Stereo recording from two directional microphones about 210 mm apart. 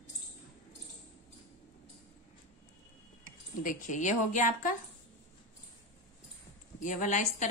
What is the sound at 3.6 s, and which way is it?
A woman's voice, 35° left (ahead or behind).